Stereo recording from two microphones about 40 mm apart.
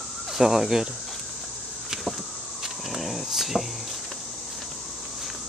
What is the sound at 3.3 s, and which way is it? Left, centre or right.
Speech, centre.